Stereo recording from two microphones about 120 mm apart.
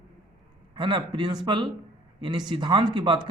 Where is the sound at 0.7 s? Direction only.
40° right (ahead or behind).